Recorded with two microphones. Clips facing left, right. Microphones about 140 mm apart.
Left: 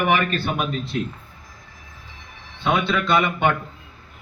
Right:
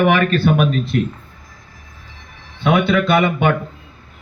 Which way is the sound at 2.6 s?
60° right (ahead or behind).